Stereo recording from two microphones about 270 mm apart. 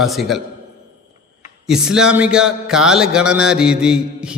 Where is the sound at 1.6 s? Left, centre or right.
Centre.